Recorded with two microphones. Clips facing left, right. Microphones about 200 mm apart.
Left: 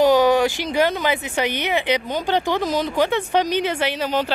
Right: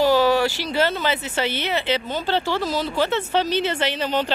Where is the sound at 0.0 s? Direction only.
20° left (ahead or behind).